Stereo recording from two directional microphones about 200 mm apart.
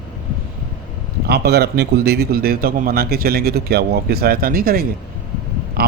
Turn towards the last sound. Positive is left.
turn(degrees=-50)  # may be behind; listen again after turning